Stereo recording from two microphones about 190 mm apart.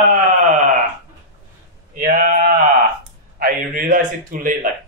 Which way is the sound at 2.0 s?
50° right (ahead or behind).